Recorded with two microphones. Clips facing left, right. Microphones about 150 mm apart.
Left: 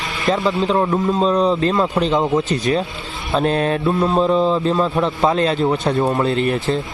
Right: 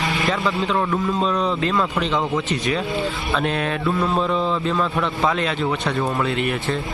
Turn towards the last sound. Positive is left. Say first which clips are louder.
# left 4 dB
turn(degrees=30)  # may be behind; listen again after turning